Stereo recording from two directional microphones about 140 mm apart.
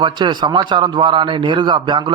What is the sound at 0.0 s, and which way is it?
A man's voice, 30° right (ahead or behind).